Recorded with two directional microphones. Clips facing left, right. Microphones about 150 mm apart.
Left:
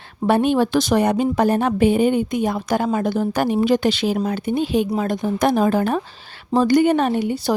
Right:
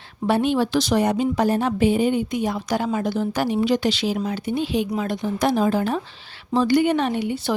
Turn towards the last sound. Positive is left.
turn(degrees=40)  # may be behind; listen again after turning